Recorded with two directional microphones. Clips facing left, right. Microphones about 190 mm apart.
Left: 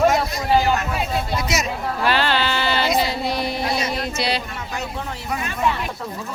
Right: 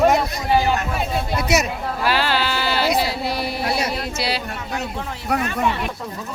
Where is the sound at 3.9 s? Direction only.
5° right (ahead or behind).